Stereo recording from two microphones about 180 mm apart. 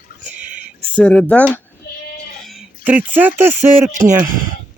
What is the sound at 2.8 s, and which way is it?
Speech, 10° right (ahead or behind).